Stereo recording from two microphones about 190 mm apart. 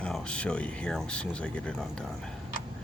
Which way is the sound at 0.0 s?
5° left (ahead or behind).